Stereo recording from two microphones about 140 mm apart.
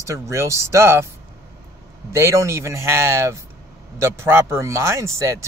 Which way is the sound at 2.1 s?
20° right (ahead or behind).